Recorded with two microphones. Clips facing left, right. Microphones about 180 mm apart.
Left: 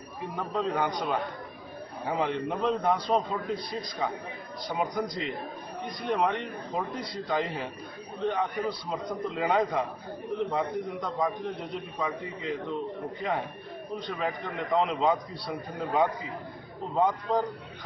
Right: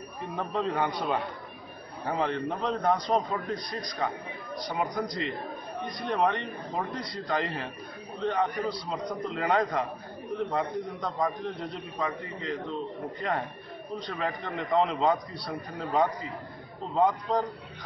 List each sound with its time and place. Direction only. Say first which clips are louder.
0.2 s a man's voice: even; centre (ahead or behind)
2.1 s a man's voice: even; 15° left (ahead or behind)
2.9 s a man's voice: even; centre (ahead or behind)